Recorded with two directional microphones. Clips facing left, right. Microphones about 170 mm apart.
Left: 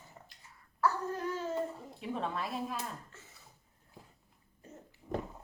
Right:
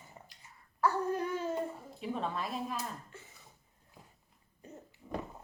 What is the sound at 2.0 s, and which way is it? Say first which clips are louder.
Speech: even; centre (ahead or behind).